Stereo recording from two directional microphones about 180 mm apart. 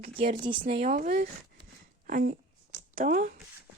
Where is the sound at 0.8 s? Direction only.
45° right (ahead or behind).